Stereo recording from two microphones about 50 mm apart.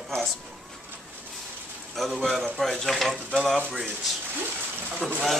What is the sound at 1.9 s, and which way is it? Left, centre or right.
Speech, centre.